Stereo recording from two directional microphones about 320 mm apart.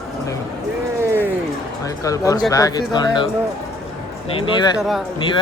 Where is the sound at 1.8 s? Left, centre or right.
Centre.